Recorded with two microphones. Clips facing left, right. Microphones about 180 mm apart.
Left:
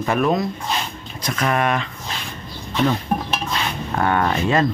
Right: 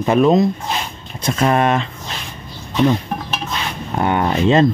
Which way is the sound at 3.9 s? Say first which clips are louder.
Right 2 dB; 20° right (ahead or behind).